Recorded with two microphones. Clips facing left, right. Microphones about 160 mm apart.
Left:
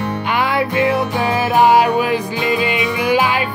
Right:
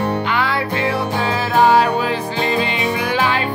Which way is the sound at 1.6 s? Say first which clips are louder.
Left 1 dB; 10° left (ahead or behind).